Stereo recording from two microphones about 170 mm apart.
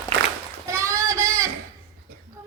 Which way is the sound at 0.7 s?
15° right (ahead or behind).